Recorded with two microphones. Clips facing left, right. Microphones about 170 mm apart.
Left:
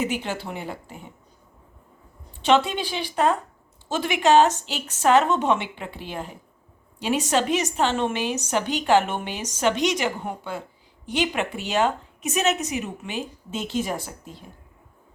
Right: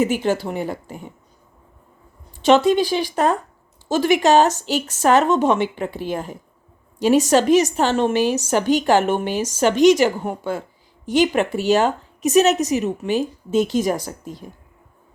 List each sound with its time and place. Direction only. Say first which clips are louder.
0.0 s speech: right 8 dB; 45° right (ahead or behind)
2.6 s a woman's voice: right 11 dB; 40° right (ahead or behind)